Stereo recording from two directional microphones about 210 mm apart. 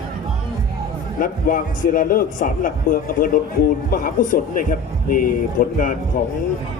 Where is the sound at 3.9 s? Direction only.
40° left (ahead or behind).